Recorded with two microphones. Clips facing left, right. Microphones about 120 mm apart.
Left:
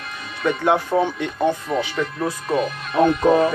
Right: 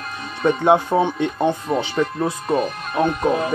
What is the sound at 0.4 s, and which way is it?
Speech, 30° right (ahead or behind).